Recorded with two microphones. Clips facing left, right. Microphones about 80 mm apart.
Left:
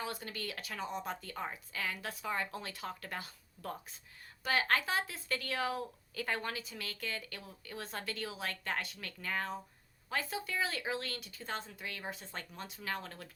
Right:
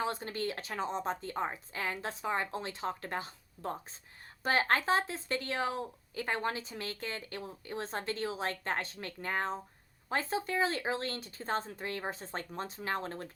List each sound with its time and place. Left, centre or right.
0.0 s a woman's voice: right